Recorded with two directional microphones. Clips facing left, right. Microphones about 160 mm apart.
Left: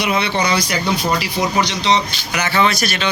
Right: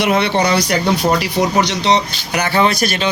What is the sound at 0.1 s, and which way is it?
Speech, 55° right (ahead or behind).